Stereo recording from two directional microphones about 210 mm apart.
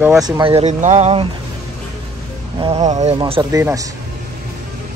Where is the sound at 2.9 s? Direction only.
35° right (ahead or behind).